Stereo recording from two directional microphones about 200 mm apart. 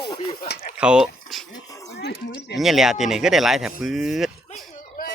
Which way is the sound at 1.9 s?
55° left (ahead or behind).